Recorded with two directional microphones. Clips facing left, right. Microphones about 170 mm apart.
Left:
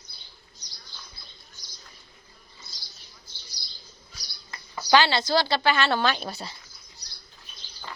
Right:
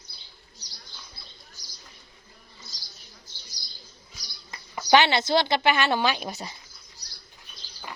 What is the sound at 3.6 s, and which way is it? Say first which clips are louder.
Bird: even; 45° right (ahead or behind).